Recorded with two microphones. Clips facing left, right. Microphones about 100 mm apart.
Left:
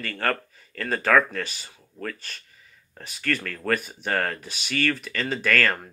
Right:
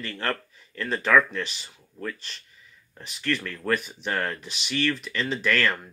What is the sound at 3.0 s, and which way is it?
Speech, 45° left (ahead or behind).